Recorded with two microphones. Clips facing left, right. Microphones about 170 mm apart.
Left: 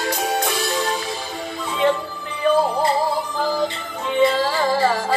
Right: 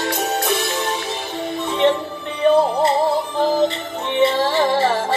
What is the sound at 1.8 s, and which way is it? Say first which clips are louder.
Music: right 2 dB; 25° right (ahead or behind).